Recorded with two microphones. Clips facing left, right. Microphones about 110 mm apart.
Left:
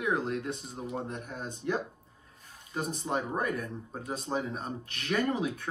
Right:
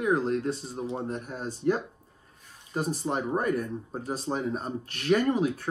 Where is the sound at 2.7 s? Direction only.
35° right (ahead or behind).